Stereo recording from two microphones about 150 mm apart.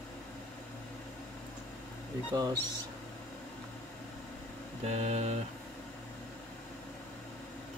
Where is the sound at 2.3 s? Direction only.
25° right (ahead or behind).